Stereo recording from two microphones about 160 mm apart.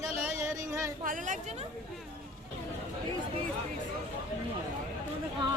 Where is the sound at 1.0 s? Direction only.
55° right (ahead or behind).